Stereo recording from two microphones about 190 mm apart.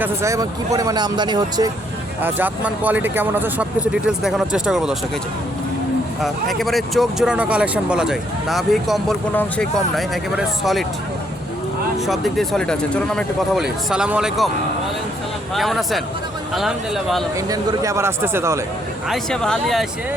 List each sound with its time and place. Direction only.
0.0 s speech: 15° right (ahead or behind)
2.2 s speech: 10° right (ahead or behind)
6.2 s speech: centre (ahead or behind)
11.9 s speech: centre (ahead or behind)
15.5 s speech: centre (ahead or behind)
17.3 s speech: 20° right (ahead or behind)
19.0 s speech: centre (ahead or behind)